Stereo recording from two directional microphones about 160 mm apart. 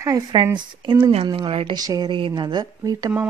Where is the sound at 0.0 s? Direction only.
25° right (ahead or behind).